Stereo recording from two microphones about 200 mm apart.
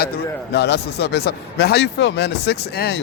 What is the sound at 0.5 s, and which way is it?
A man's voice, 55° left (ahead or behind).